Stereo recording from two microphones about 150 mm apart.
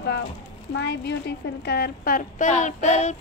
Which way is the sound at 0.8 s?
90° left.